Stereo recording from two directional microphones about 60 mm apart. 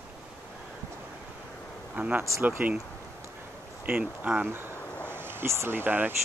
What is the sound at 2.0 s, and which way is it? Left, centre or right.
Speech, right.